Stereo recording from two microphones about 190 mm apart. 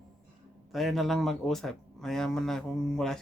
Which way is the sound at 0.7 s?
Centre (ahead or behind).